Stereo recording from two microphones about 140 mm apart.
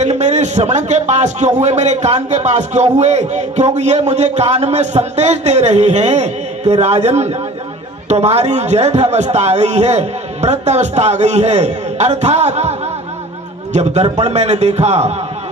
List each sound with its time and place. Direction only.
0.0 s a man's voice: 55° right (ahead or behind)
13.7 s a man's voice: 55° right (ahead or behind)